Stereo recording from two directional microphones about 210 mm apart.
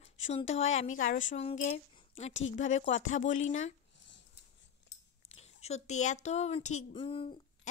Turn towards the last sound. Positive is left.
turn(degrees=25)  # may be behind; listen again after turning